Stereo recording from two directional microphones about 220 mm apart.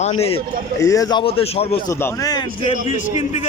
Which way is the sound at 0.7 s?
15° left (ahead or behind).